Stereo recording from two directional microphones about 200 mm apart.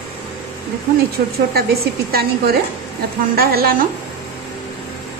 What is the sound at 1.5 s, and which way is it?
A woman's voice, 50° right (ahead or behind).